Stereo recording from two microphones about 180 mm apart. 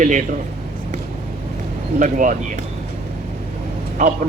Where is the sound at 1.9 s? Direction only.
45° right (ahead or behind).